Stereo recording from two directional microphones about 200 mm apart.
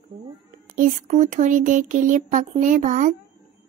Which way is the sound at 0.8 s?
40° right (ahead or behind).